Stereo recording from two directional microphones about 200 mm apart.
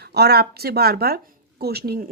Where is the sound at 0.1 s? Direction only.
55° right (ahead or behind).